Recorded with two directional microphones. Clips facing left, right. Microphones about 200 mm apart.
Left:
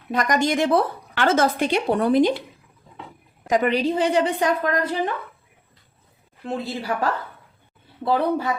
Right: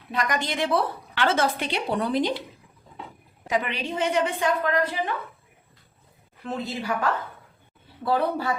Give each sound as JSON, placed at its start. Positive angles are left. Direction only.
{"t": 0.1, "sound": "a woman's voice", "side_deg": 45}
{"t": 3.4, "sound": "a woman's voice", "side_deg": 45}
{"t": 6.4, "sound": "a woman's voice", "side_deg": 30}
{"t": 8.0, "sound": "speech", "side_deg": 20}